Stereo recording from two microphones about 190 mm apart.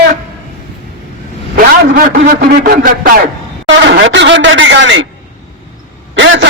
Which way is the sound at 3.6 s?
65° right (ahead or behind).